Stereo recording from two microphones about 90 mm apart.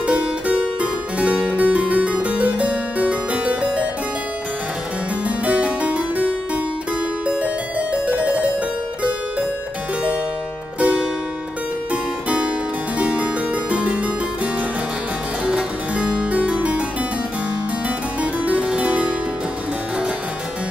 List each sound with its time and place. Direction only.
0.0 s harpsichord: 15° right (ahead or behind)
5.4 s music: 15° right (ahead or behind)
7.9 s music: 15° right (ahead or behind)
10.8 s music: 15° right (ahead or behind)
13.0 s harpsichord: 15° right (ahead or behind)
17.8 s harpsichord: 15° right (ahead or behind)